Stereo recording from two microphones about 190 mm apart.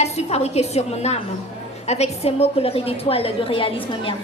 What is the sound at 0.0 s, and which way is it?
A woman's voice, 35° left (ahead or behind).